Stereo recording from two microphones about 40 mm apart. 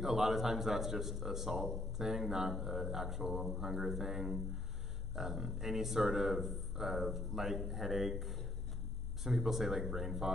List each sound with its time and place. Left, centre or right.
0.0 s a man's voice: centre
9.2 s a man's voice: centre